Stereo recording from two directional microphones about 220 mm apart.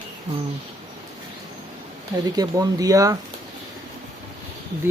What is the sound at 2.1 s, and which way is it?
Speech, 15° right (ahead or behind).